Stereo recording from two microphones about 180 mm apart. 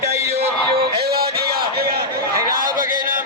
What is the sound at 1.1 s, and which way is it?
Battle cry, 60° right (ahead or behind).